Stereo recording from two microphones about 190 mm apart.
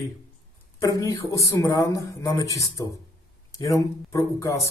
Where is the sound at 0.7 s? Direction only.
15° left (ahead or behind).